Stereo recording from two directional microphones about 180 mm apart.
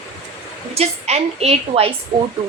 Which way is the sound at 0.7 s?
35° right (ahead or behind).